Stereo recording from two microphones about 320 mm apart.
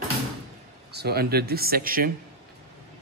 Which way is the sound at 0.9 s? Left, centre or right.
Right.